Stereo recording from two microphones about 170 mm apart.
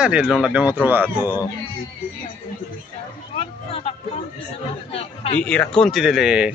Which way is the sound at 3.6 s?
35° left (ahead or behind).